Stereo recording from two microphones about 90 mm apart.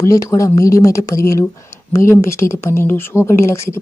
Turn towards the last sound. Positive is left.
turn(degrees=30)  # may be behind; listen again after turning